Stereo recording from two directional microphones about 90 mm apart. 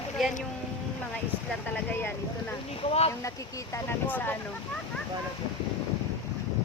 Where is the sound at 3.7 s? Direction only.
25° left (ahead or behind).